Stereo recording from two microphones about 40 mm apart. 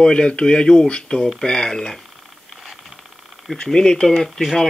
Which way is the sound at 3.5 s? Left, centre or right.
Centre.